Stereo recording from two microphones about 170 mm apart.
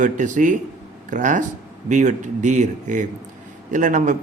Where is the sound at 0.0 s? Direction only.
50° right (ahead or behind).